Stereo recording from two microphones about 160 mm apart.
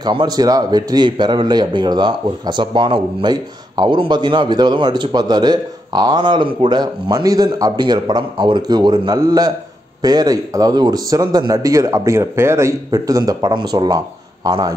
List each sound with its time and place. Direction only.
0.0 s a man's voice: 25° right (ahead or behind)